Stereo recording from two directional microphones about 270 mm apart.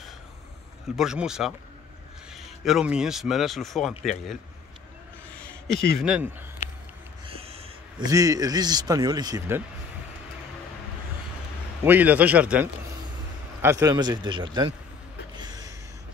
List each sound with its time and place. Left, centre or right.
0.9 s a man's voice: centre
5.3 s a sound: centre
5.9 s a man's voice: centre
7.3 s a man's voice: right
11.8 s a man's voice: centre
15.3 s gasp: centre